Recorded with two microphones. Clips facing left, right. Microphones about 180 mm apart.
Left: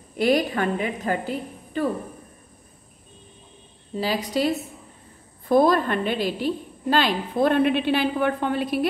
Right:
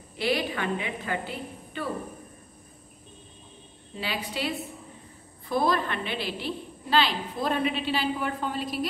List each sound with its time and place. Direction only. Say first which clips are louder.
0.2 s a woman's voice: left 7 dB; 45° left (ahead or behind)
3.9 s a woman's voice: left 8 dB; 40° left (ahead or behind); by 8.8 s 60° left (ahead or behind)